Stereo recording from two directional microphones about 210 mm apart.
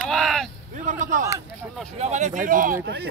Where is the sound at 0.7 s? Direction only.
35° right (ahead or behind).